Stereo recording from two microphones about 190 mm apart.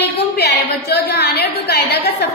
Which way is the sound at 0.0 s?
60° left (ahead or behind).